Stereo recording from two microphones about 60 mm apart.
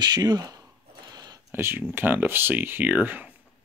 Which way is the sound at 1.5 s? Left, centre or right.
Right.